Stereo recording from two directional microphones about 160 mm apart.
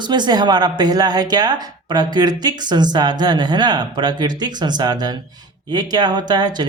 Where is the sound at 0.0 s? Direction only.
25° right (ahead or behind).